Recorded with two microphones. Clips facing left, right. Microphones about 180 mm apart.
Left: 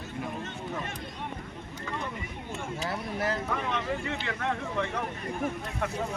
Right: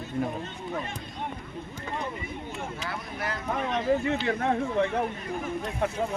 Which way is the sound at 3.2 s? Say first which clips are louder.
Left 4 dB; 30° left (ahead or behind).